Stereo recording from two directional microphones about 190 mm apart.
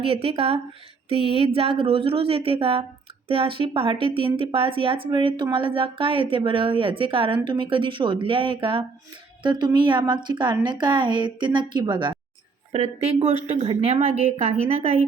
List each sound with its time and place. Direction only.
0.0 s a woman's voice: 30° right (ahead or behind)